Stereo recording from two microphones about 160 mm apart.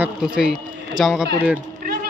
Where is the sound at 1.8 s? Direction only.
70° right (ahead or behind).